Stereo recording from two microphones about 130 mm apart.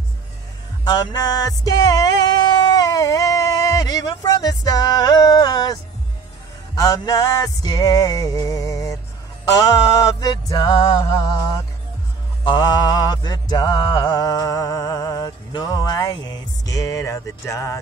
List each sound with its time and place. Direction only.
0.8 s music: 30° left (ahead or behind)
12.4 s mantra: 35° left (ahead or behind)